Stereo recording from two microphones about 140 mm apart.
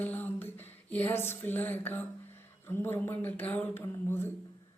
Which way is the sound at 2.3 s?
15° left (ahead or behind).